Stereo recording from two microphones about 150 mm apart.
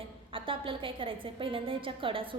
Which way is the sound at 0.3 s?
35° right (ahead or behind).